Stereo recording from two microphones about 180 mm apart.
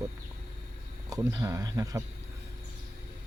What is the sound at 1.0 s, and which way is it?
Speech, 20° right (ahead or behind).